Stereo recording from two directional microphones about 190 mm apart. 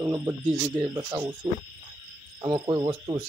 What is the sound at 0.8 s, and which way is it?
Speech, 20° right (ahead or behind).